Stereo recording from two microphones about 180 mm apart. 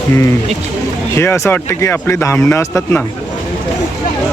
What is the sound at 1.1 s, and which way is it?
Speech, 15° left (ahead or behind).